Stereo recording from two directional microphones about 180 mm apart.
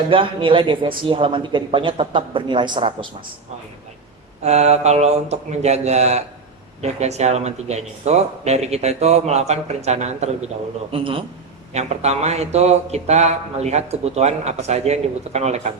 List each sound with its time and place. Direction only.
0.1 s speech: 30° right (ahead or behind)
4.4 s speech: 35° right (ahead or behind)